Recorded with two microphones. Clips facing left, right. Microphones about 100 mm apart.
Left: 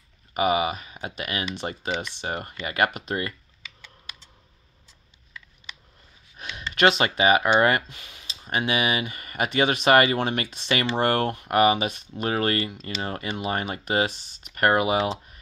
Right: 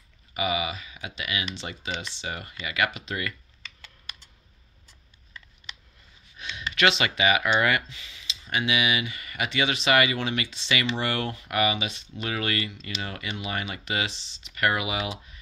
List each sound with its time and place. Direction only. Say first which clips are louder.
0.3 s speech: left 6 dB; 45° left (ahead or behind)
6.4 s a sound: left 1 dB; 45° left (ahead or behind)
6.7 s speech: left 4 dB; 40° left (ahead or behind)